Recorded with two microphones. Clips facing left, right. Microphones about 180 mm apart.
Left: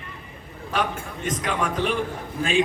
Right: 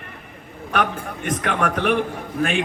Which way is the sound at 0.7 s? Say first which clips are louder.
Right 3 dB; 65° right (ahead or behind).